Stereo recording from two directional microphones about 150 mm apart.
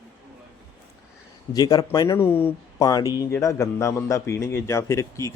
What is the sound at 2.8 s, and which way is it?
A man's voice, 25° left (ahead or behind).